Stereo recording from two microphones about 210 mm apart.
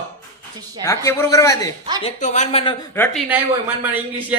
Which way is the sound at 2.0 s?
30° left (ahead or behind).